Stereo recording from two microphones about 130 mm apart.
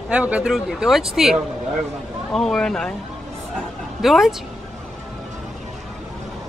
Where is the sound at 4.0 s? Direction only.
Centre (ahead or behind).